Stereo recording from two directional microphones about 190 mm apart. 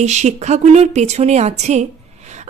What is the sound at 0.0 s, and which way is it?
A woman's voice, 35° right (ahead or behind).